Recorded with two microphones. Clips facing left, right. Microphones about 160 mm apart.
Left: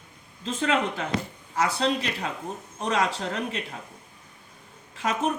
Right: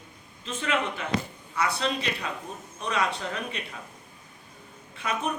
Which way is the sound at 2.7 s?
85° left.